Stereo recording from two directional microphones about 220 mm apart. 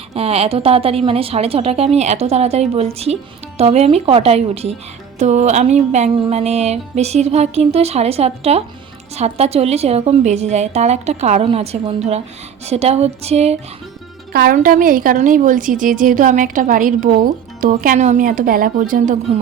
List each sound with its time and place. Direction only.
0.1 s music: 25° right (ahead or behind)
14.3 s a woman's voice: 40° right (ahead or behind)